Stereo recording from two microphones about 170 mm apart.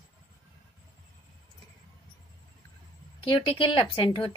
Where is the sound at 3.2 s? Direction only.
30° left (ahead or behind).